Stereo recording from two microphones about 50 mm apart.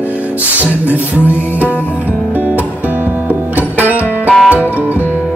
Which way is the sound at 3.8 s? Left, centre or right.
Right.